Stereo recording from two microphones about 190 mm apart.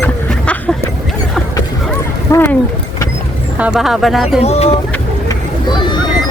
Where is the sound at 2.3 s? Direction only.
10° left (ahead or behind).